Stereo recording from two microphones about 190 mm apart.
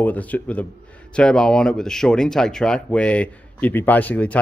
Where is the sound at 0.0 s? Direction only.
10° left (ahead or behind).